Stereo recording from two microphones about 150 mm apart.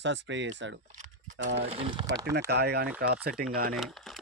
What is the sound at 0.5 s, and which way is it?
Speech, 55° right (ahead or behind).